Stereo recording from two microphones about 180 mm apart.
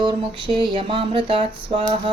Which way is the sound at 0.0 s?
25° right (ahead or behind).